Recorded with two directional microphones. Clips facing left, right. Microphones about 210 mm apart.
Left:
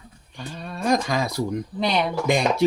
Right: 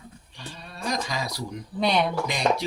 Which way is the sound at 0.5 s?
50° left (ahead or behind).